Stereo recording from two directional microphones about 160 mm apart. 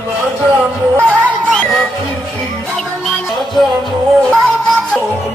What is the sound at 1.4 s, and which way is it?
Music, 5° left (ahead or behind).